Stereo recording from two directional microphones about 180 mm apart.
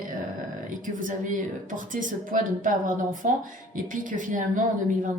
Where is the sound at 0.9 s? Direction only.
45° right (ahead or behind).